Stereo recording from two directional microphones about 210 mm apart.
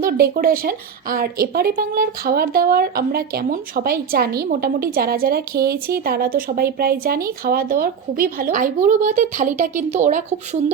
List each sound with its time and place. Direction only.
0.0 s a woman's voice: 45° right (ahead or behind)